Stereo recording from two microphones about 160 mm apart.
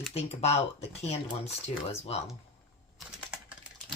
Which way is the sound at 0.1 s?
40° left (ahead or behind).